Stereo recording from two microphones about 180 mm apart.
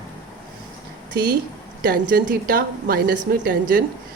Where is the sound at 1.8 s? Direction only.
55° right (ahead or behind).